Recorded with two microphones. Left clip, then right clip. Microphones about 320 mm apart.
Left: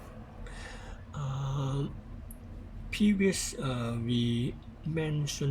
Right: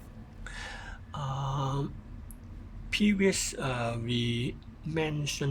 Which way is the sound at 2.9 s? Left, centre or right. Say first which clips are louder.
Right 2 dB; right.